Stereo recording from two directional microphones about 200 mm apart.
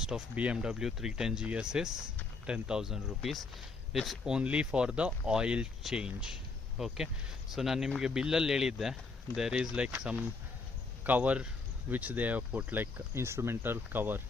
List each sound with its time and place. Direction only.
0.0 s speech: 5° right (ahead or behind)